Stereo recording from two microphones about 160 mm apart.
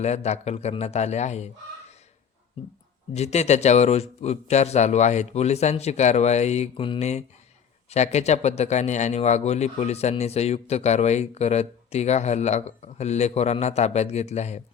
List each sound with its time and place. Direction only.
0.0 s a man's voice: 45° left (ahead or behind)
3.2 s a man's voice: 45° left (ahead or behind)